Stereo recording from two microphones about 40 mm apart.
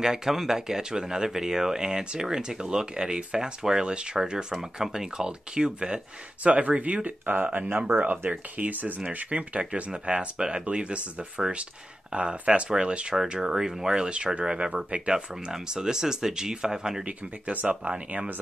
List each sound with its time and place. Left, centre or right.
0.0 s speech: centre
6.4 s speech: right; by 17.0 s centre
17.6 s speech: right